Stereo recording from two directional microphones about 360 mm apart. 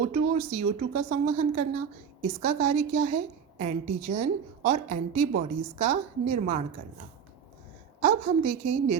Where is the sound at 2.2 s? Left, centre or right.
Centre.